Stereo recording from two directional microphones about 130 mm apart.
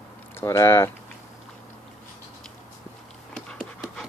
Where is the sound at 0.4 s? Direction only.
20° left (ahead or behind).